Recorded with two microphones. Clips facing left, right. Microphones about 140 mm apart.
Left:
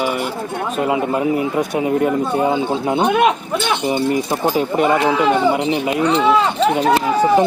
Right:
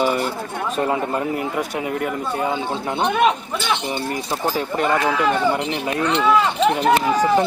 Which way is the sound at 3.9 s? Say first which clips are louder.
Left 7 dB; 15° left (ahead or behind).